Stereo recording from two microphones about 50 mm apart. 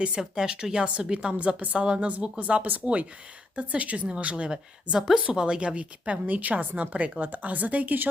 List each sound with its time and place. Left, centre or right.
0.2 s a woman's voice: centre; by 8.1 s right